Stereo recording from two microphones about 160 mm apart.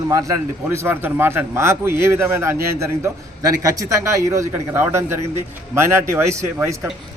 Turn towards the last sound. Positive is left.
turn(degrees=-15)  # may be behind; listen again after turning